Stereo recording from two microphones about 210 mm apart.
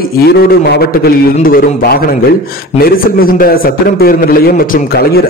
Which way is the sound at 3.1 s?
45° left (ahead or behind).